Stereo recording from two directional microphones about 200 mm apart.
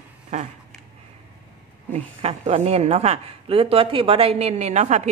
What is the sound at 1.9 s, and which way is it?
A woman's voice, 30° right (ahead or behind).